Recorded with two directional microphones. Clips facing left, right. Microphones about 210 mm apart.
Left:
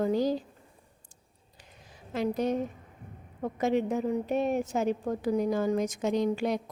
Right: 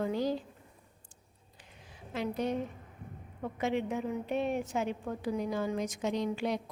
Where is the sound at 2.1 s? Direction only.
40° left (ahead or behind).